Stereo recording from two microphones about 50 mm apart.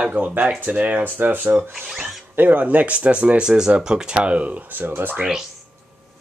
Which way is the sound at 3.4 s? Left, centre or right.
Centre.